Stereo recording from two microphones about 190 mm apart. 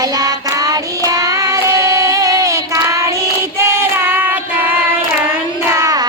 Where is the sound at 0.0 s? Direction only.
20° right (ahead or behind).